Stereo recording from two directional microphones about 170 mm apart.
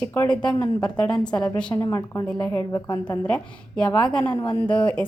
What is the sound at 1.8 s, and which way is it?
A woman's voice, 20° left (ahead or behind).